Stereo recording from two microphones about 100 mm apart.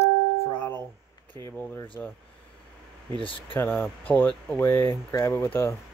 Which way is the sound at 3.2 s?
60° left (ahead or behind).